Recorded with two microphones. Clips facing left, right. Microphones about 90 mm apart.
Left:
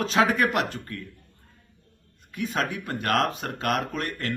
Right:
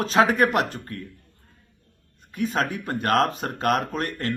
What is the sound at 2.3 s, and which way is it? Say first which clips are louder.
Speech: right 3 dB; 35° right (ahead or behind).